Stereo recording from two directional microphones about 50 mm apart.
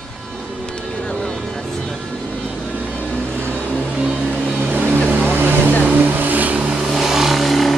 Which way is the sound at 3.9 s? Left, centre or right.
Centre.